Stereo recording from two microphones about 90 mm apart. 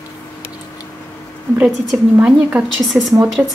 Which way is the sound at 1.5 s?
10° right (ahead or behind).